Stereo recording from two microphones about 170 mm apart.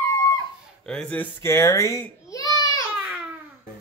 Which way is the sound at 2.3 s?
20° left (ahead or behind).